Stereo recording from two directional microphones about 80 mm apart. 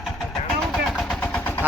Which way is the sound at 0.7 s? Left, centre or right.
Centre.